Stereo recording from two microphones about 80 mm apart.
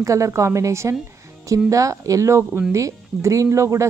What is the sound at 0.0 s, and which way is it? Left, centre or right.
Speech, right.